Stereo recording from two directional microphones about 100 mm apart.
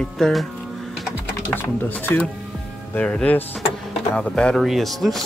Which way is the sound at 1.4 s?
20° left (ahead or behind).